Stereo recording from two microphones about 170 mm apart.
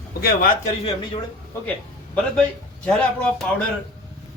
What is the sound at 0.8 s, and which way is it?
Speech, 30° left (ahead or behind).